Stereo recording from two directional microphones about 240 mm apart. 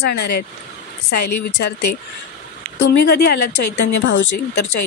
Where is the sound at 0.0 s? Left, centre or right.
Left.